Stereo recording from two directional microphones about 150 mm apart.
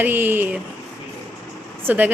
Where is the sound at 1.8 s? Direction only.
10° right (ahead or behind).